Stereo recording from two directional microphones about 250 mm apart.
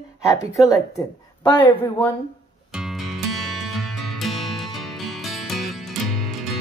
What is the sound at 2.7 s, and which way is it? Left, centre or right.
Music, centre.